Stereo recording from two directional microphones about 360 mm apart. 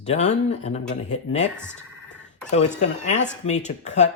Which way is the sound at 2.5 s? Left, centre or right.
Centre.